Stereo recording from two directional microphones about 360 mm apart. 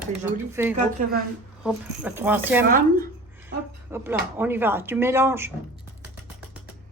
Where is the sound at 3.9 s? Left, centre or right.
Centre.